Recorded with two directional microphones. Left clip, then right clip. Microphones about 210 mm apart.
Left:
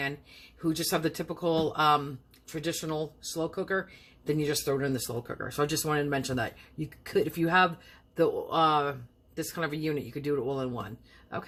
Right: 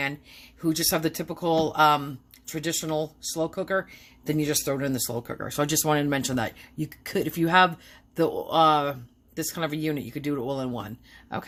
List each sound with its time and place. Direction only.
0.0 s speech: 40° right (ahead or behind)